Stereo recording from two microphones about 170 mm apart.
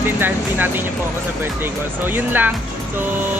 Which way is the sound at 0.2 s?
10° right (ahead or behind).